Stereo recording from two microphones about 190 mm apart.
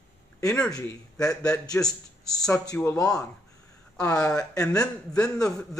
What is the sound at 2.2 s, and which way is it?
Speech, 20° left (ahead or behind).